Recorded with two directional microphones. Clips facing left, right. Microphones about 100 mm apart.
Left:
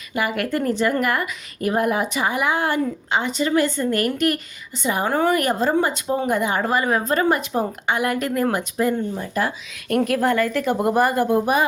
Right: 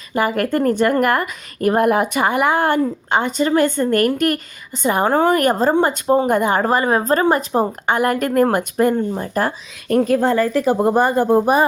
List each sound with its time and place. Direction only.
0.1 s a woman's voice: 40° right (ahead or behind)
9.9 s speech: 25° right (ahead or behind)